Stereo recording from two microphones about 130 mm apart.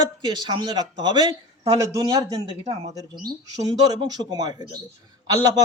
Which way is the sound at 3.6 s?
30° right (ahead or behind).